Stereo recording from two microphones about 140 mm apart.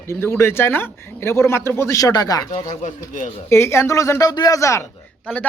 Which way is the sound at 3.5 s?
20° left (ahead or behind).